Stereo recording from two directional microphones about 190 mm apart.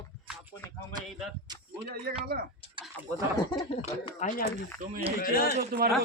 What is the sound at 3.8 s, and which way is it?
Speech, 35° left (ahead or behind).